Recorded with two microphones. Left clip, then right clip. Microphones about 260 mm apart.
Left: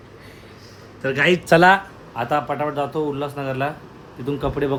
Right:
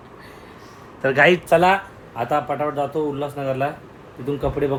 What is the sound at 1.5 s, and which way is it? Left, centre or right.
Speech, left.